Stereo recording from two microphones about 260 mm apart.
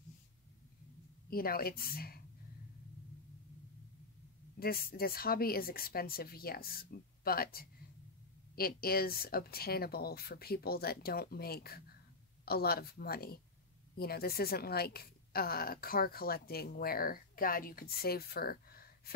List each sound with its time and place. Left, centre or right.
1.3 s a woman's voice: left
4.6 s a woman's voice: left